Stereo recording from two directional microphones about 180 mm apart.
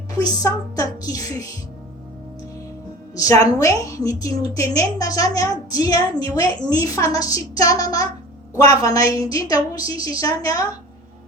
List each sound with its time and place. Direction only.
0.2 s a woman's voice: 20° left (ahead or behind)
3.2 s a woman's voice: 20° left (ahead or behind)